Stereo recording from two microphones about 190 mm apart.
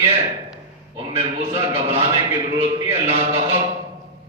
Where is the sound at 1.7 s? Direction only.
35° right (ahead or behind).